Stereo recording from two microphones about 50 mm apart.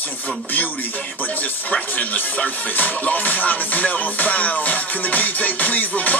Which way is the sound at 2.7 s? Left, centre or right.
Left.